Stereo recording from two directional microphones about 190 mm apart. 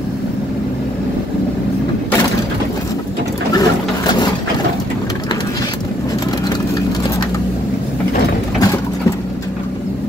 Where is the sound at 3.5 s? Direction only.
20° left (ahead or behind).